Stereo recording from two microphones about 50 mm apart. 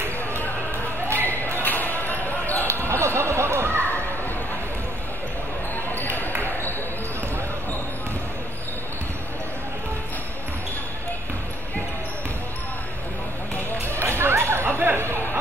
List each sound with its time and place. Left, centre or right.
1.6 s basketball bounce: left
2.9 s a sound: right
5.9 s basketball bounce: left
13.9 s music: right